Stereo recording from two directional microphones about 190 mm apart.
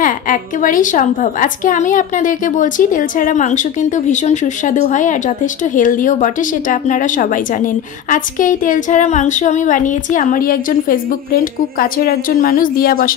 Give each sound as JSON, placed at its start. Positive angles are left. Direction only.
{"t": 0.0, "sound": "a woman's voice", "side_deg": 45}